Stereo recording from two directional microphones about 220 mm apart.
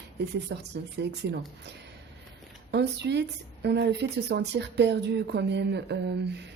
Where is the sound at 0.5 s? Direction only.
55° right (ahead or behind).